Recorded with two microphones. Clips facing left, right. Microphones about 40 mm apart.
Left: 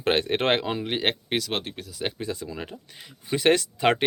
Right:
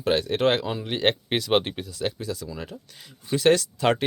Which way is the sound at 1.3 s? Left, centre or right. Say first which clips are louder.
Right 1 dB; centre.